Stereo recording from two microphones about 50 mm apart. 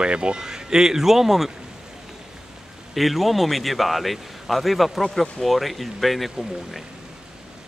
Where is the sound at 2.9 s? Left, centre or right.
Centre.